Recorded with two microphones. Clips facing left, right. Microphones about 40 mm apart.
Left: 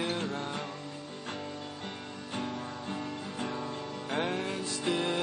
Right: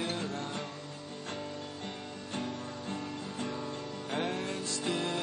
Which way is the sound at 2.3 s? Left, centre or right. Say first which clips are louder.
Left 2 dB; centre.